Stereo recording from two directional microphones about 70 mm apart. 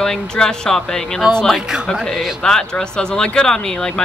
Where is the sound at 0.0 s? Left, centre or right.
Centre.